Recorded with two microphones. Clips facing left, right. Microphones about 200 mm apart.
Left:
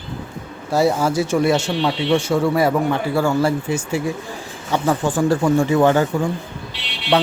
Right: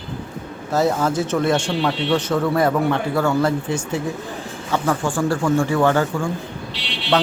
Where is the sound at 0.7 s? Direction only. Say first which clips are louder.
Left 2 dB; 10° left (ahead or behind).